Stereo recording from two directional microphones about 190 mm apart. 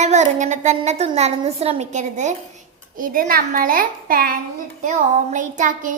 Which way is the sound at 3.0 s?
45° right (ahead or behind).